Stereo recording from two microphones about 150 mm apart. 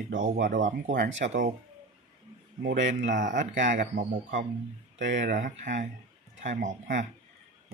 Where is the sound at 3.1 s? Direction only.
60° right (ahead or behind).